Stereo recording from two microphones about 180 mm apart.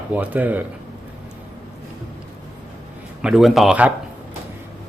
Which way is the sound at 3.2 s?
Centre (ahead or behind).